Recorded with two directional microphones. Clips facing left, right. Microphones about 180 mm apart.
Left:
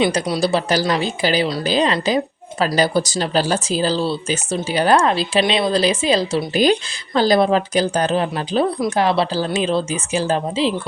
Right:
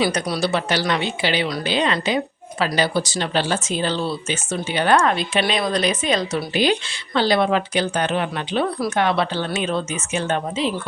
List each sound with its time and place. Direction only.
0.0 s a woman's voice: 25° left (ahead or behind)